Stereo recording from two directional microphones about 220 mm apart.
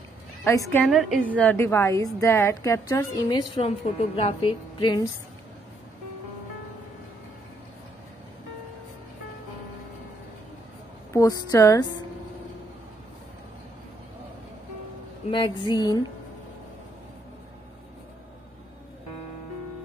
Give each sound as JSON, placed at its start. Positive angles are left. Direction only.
{"t": 0.4, "sound": "a woman's voice", "side_deg": 10}
{"t": 0.8, "sound": "a woman's voice", "side_deg": 0}
{"t": 3.5, "sound": "a woman's voice", "side_deg": 25}
{"t": 11.1, "sound": "a woman's voice", "side_deg": 15}
{"t": 15.3, "sound": "a woman's voice", "side_deg": 20}